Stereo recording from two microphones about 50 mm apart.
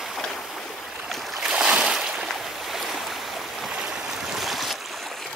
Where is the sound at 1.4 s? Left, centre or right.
Centre.